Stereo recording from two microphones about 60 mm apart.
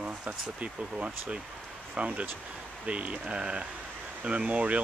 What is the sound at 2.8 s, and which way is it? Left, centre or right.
Speech, right.